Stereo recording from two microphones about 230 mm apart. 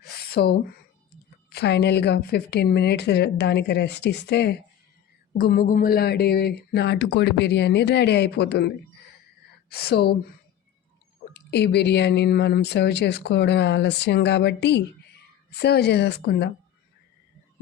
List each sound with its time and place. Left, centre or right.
0.0 s a sound: left
1.5 s a woman's voice: left
11.3 s a woman's voice: left